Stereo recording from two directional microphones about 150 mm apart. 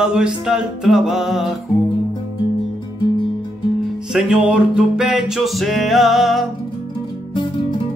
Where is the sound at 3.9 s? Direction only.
5° right (ahead or behind).